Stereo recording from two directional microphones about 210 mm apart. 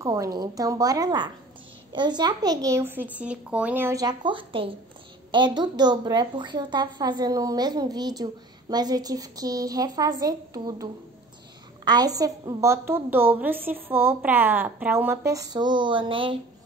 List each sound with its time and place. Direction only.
0.0 s a woman's voice: 15° right (ahead or behind)